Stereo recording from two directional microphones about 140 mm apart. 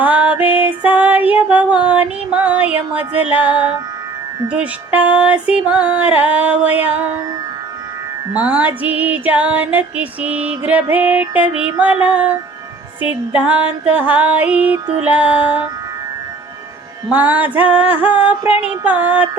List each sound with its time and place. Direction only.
0.0 s female singing: 10° right (ahead or behind)
4.4 s music: 10° right (ahead or behind)
8.3 s music: 10° right (ahead or behind)
17.1 s music: 10° right (ahead or behind)